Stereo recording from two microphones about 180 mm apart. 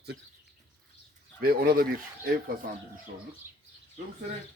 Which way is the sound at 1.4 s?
55° right (ahead or behind).